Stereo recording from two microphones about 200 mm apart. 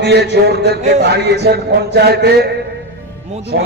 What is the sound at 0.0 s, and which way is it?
A man's voice, 55° right (ahead or behind).